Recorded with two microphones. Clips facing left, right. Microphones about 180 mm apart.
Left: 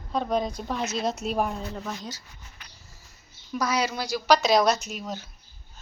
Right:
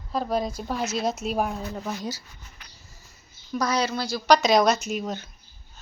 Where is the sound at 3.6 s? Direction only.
10° left (ahead or behind).